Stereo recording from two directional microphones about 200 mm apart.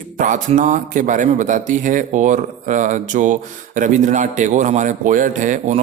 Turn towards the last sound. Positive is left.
turn(degrees=-35)  # may be behind; listen again after turning